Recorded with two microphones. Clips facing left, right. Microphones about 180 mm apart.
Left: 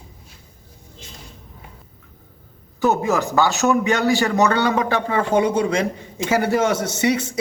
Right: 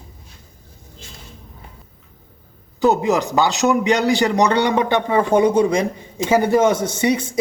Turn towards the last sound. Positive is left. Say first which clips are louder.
# right 1 dB
turn(degrees=-15)  # may be behind; listen again after turning